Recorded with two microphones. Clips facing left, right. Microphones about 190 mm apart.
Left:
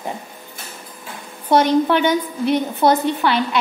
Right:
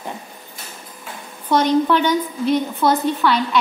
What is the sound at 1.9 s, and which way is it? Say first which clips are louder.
A woman's voice: left 1 dB; 60° left (ahead or behind).